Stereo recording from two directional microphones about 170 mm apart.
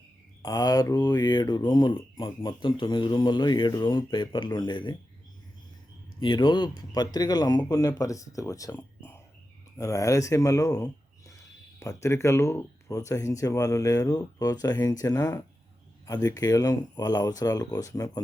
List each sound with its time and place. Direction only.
0.4 s speech: 20° left (ahead or behind)
6.1 s speech: 30° left (ahead or behind)
9.7 s speech: 20° left (ahead or behind)